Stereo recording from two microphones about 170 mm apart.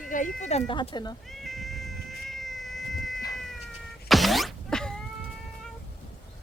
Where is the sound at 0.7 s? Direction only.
30° left (ahead or behind).